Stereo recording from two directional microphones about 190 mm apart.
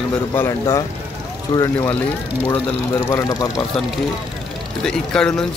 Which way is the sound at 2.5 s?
10° left (ahead or behind).